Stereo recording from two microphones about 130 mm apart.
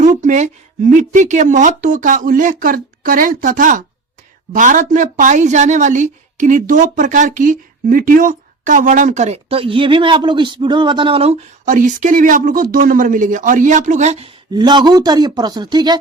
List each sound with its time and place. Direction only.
0.0 s speech: 75° right (ahead or behind); by 3.8 s 90° right
4.5 s a woman's voice: 75° right (ahead or behind); by 11.3 s 45° right (ahead or behind)
11.6 s speech: 75° right (ahead or behind); by 14.3 s 60° right (ahead or behind)
14.5 s speech: 35° right (ahead or behind)